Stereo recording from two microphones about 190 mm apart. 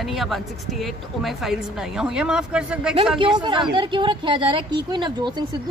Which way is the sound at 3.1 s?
25° right (ahead or behind).